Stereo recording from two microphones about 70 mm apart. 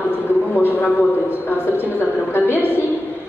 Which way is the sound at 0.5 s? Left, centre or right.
Left.